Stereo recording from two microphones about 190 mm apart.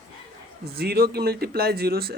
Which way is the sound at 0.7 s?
55° right (ahead or behind).